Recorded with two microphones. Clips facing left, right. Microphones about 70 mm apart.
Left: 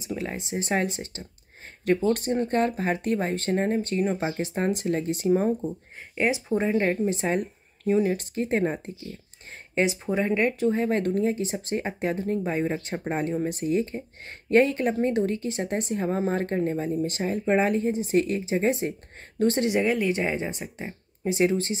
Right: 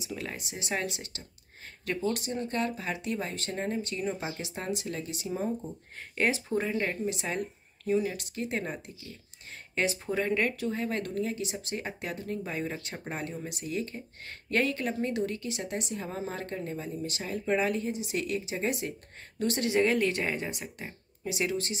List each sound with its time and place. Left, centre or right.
0.0 s speech: left
6.1 s speech: centre
6.6 s speech: left
9.8 s speech: centre
19.7 s speech: centre
20.1 s speech: centre
21.2 s speech: left